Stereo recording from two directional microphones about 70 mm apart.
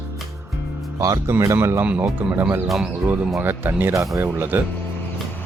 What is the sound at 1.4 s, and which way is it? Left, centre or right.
Speech, right.